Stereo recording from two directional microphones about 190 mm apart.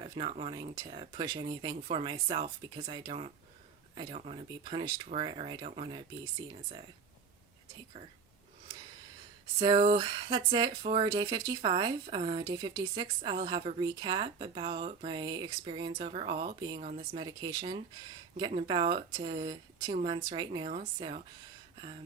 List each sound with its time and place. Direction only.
0.0 s speech: 30° right (ahead or behind)
9.6 s speech: 25° right (ahead or behind)
16.6 s speech: 25° right (ahead or behind)